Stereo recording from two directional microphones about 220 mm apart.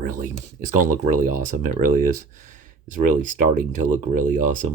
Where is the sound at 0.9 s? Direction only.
40° right (ahead or behind).